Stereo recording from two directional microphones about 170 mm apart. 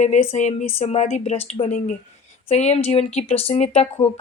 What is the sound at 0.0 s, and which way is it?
Speech, 45° left (ahead or behind).